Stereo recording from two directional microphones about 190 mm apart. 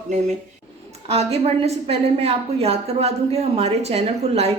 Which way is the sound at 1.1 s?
30° right (ahead or behind).